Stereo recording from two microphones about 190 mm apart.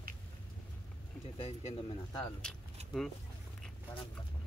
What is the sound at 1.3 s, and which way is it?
Speech, 30° left (ahead or behind).